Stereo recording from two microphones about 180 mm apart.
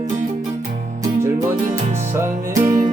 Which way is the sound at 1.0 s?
15° right (ahead or behind).